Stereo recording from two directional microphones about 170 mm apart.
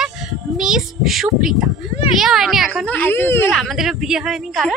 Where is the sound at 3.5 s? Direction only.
Centre (ahead or behind).